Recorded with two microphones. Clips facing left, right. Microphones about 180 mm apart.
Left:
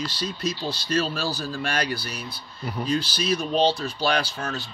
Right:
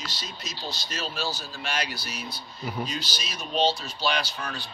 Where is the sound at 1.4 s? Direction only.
50° left (ahead or behind).